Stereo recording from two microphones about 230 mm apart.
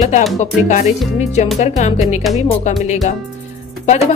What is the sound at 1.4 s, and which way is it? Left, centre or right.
Speech, left.